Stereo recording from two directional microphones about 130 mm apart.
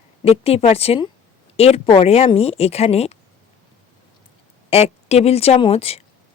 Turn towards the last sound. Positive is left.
turn(degrees=50)  # may be behind; listen again after turning